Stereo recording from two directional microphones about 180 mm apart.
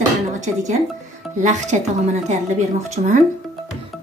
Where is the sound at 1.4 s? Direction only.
40° right (ahead or behind).